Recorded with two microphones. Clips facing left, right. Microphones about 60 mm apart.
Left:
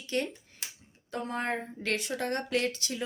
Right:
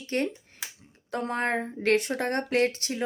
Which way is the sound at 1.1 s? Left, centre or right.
Right.